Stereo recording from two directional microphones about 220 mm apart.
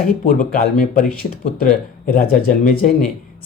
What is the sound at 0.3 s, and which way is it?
Speech, 40° left (ahead or behind).